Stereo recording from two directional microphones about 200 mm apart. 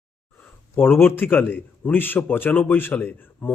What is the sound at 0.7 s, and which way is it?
A man's voice, 10° left (ahead or behind).